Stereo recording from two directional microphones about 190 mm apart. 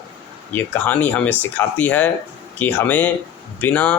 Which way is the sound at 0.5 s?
10° left (ahead or behind).